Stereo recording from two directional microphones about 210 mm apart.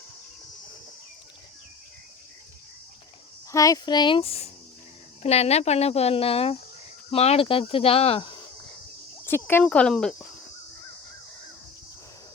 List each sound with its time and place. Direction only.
3.5 s speech: 15° left (ahead or behind)
9.2 s speech: 10° left (ahead or behind)